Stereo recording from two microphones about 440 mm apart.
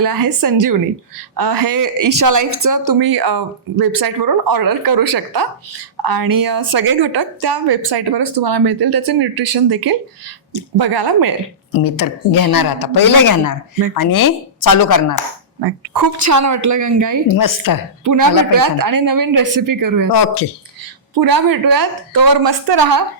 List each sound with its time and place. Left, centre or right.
0.0 s speech: right
11.7 s a woman's voice: left
15.6 s a woman's voice: right
17.3 s a woman's voice: left
18.0 s speech: right
20.1 s a woman's voice: left
21.2 s speech: right